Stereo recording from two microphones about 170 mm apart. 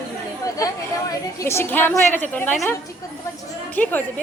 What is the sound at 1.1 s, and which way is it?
A woman's voice, 15° left (ahead or behind).